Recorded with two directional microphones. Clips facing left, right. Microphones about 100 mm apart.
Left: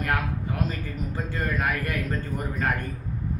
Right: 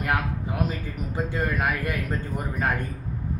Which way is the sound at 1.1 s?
15° right (ahead or behind).